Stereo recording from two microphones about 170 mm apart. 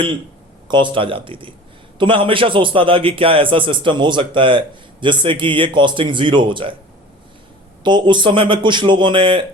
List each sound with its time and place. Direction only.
0.7 s a man's voice: 30° right (ahead or behind)
7.9 s a man's voice: 25° right (ahead or behind)